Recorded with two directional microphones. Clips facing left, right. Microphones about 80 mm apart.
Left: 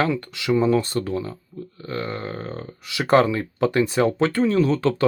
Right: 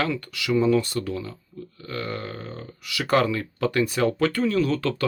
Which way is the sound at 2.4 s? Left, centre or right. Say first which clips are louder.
Left 5 dB; left.